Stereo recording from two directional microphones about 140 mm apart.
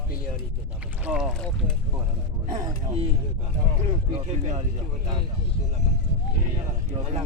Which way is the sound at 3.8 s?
50° right (ahead or behind).